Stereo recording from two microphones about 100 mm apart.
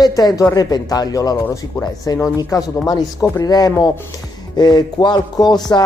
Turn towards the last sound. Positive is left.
turn(degrees=40)  # may be behind; listen again after turning